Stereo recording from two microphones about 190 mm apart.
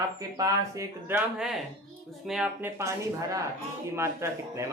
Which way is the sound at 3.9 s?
15° right (ahead or behind).